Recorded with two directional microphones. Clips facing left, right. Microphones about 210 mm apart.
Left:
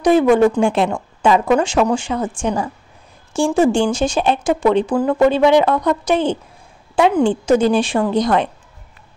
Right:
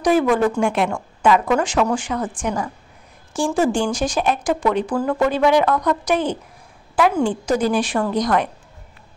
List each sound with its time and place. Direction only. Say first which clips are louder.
0.0 s speech: left 5 dB; 25° left (ahead or behind)